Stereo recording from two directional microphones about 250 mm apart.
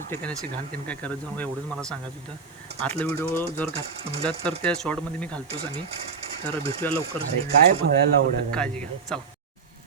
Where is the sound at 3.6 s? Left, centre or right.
Right.